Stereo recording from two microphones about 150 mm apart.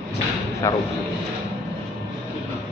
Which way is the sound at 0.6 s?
20° left (ahead or behind).